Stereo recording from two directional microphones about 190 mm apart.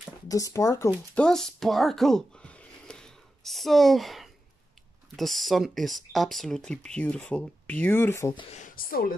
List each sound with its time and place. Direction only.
0.3 s speech: 15° left (ahead or behind)
1.2 s a sound: 5° left (ahead or behind)
5.1 s speech: centre (ahead or behind)
8.4 s speech: 35° left (ahead or behind)